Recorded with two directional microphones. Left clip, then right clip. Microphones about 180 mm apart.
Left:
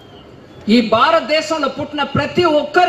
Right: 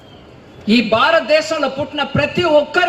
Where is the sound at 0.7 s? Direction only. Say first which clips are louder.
Left 1 dB; 35° right (ahead or behind).